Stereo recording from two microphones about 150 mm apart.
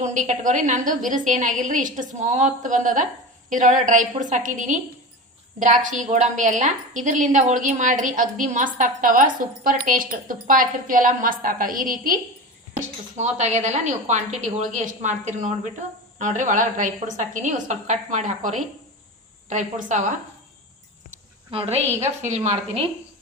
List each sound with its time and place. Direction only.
0.0 s a woman's voice: 55° right (ahead or behind)
13.1 s a woman's voice: 50° right (ahead or behind)
21.5 s a woman's voice: 40° right (ahead or behind)